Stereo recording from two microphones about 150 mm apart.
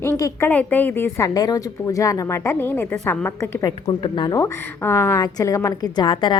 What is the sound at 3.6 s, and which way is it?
A woman's voice, 25° left (ahead or behind).